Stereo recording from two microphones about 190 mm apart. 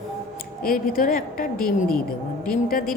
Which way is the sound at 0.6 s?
50° left (ahead or behind).